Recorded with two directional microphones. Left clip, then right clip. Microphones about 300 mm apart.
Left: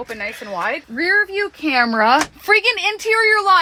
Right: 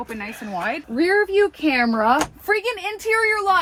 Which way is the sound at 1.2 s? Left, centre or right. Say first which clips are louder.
Right 1 dB; centre.